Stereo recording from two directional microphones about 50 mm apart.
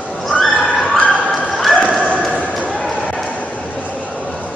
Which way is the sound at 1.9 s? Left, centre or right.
Left.